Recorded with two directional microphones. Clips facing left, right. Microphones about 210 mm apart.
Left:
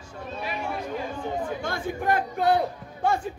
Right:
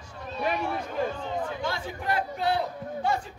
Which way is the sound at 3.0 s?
50° left (ahead or behind).